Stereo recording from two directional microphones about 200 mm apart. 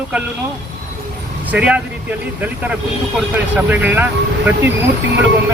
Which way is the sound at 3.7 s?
10° right (ahead or behind).